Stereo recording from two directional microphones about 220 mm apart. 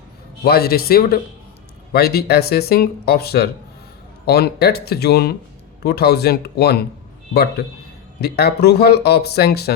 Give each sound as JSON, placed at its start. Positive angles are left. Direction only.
{"t": 0.4, "sound": "speech", "side_deg": 45}